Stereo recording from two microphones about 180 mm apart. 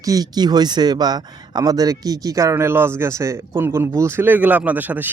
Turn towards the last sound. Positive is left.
turn(degrees=-10)  # may be behind; listen again after turning